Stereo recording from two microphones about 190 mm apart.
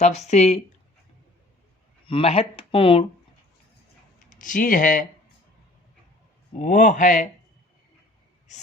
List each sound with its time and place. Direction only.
0.0 s speech: 35° left (ahead or behind)
2.0 s speech: 30° left (ahead or behind)
4.3 s speech: 45° left (ahead or behind)
6.6 s speech: 40° left (ahead or behind)